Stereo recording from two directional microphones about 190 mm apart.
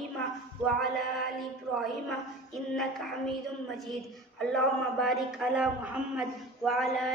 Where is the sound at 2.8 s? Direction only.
Centre (ahead or behind).